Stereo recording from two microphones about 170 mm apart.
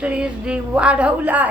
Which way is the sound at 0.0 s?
5° right (ahead or behind).